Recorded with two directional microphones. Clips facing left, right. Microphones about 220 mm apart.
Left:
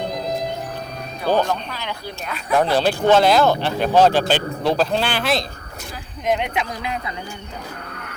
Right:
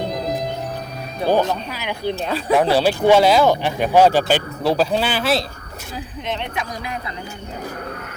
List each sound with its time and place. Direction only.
0.1 s music: centre (ahead or behind)
1.3 s speech: 10° right (ahead or behind)
2.0 s speech: 30° right (ahead or behind)
2.7 s speech: 10° right (ahead or behind)
6.2 s speech: 15° left (ahead or behind)